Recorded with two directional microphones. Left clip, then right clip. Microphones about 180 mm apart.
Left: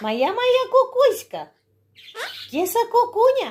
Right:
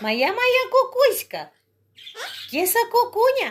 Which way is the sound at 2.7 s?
10° left (ahead or behind).